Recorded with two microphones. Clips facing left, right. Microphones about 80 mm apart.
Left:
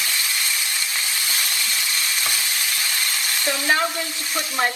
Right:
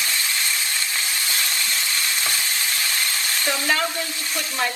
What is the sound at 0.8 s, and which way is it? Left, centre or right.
Frying, centre.